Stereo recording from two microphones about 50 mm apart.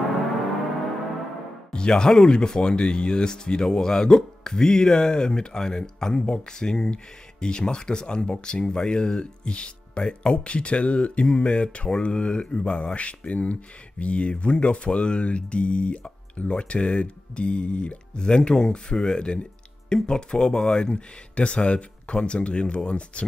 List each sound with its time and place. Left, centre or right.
1.7 s speech: centre